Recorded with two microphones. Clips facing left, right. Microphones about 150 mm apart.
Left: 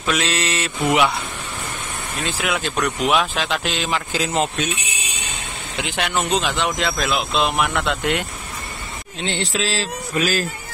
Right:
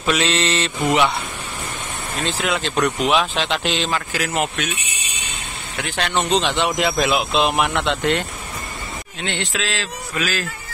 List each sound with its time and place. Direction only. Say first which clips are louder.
0.0 s speech: right 2 dB; centre (ahead or behind)
2.2 s speech: right 1 dB; 5° left (ahead or behind)
3.9 s speech: left 1 dB; 20° left (ahead or behind)
5.8 s speech: right 1 dB; 15° left (ahead or behind)
9.2 s a man's voice: left 2 dB; 35° left (ahead or behind)